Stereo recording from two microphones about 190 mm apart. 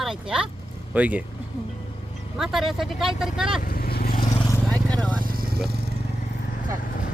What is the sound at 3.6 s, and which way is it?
Vehicle, 50° left (ahead or behind).